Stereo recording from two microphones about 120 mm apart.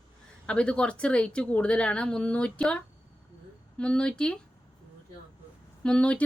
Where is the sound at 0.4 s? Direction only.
10° left (ahead or behind).